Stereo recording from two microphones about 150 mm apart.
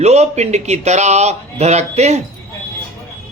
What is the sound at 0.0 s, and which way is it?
A man's voice, 45° right (ahead or behind).